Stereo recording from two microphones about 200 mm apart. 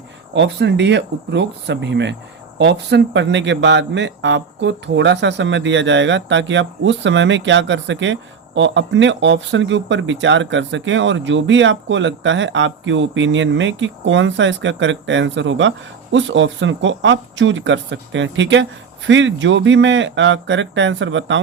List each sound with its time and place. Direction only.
0.3 s speech: 60° right (ahead or behind)